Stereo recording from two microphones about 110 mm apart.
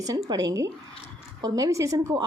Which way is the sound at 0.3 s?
35° right (ahead or behind).